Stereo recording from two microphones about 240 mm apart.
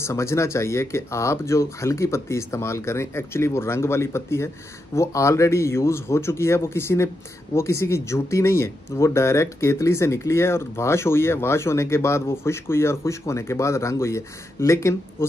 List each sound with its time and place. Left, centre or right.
0.0 s speech: centre